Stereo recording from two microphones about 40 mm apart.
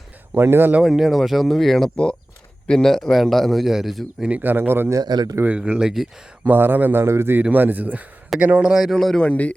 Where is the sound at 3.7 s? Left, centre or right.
Centre.